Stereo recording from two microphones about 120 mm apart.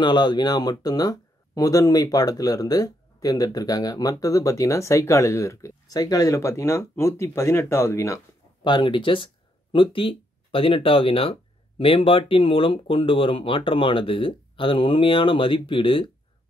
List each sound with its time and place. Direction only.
0.0 s speech: 40° left (ahead or behind)
8.6 s speech: 40° left (ahead or behind)